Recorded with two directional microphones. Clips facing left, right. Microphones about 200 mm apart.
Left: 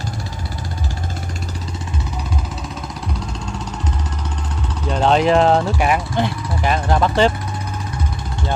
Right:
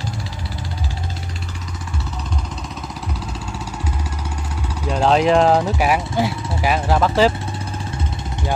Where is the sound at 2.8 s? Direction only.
5° right (ahead or behind).